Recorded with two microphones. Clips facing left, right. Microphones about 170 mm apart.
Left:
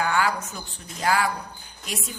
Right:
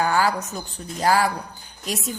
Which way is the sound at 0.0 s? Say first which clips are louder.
Right 3 dB; 35° right (ahead or behind).